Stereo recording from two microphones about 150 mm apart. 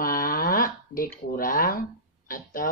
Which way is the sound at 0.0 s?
70° left (ahead or behind).